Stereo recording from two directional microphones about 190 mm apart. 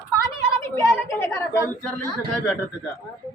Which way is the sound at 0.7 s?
10° left (ahead or behind).